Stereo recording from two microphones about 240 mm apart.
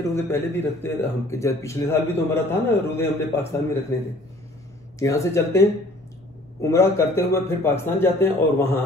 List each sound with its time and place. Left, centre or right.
0.1 s speech: centre
4.9 s speech: centre